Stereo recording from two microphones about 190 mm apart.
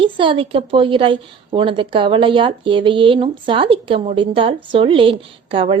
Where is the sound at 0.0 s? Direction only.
25° right (ahead or behind).